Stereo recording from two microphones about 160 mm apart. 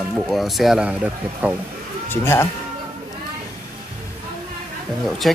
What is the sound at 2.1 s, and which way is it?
Speech, 15° left (ahead or behind).